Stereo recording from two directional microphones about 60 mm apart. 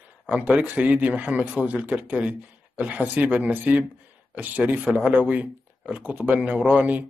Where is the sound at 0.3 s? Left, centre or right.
Right.